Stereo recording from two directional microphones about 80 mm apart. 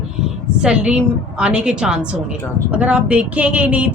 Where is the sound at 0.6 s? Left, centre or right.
Centre.